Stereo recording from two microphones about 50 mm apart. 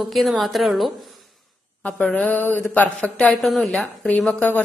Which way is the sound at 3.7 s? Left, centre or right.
Left.